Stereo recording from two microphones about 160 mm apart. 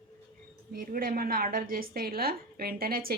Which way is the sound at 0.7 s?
65° right (ahead or behind).